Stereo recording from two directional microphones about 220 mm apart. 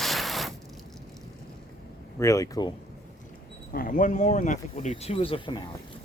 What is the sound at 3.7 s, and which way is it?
Speech, 40° left (ahead or behind).